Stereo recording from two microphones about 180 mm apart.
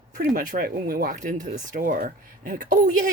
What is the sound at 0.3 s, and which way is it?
Speech, 55° right (ahead or behind).